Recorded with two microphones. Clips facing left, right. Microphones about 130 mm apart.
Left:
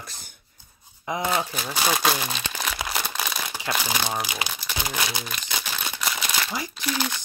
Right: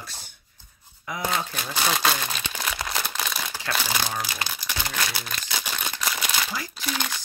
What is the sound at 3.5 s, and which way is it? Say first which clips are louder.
Speech: left 1 dB; 15° left (ahead or behind).